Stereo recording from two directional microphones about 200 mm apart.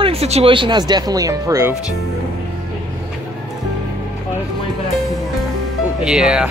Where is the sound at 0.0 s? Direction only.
30° right (ahead or behind); by 1.8 s 15° right (ahead or behind).